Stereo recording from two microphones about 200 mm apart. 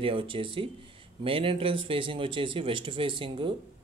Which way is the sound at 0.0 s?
25° right (ahead or behind).